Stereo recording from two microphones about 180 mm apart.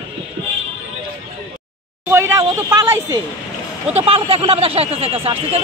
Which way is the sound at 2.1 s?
15° right (ahead or behind).